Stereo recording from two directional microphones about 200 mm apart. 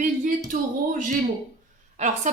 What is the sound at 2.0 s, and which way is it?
Speech, 35° right (ahead or behind).